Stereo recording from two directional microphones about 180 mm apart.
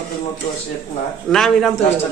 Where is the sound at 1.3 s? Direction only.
Centre (ahead or behind).